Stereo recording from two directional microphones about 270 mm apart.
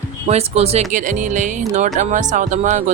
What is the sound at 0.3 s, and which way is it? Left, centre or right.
Speech, right.